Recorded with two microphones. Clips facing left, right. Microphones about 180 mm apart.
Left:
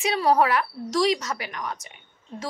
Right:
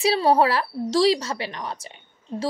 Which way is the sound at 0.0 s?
30° right (ahead or behind).